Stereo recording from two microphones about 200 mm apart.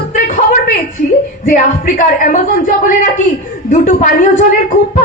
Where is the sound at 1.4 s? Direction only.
40° left (ahead or behind).